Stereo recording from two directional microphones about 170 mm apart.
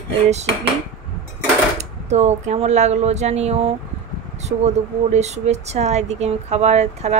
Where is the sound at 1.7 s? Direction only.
40° right (ahead or behind).